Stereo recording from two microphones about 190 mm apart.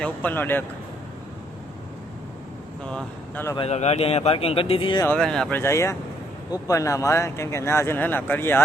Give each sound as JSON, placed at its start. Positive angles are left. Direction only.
{"t": 0.0, "sound": "speech", "side_deg": 10}
{"t": 2.8, "sound": "speech", "side_deg": 5}
{"t": 3.5, "sound": "a man's voice", "side_deg": 30}
{"t": 5.0, "sound": "speech", "side_deg": 5}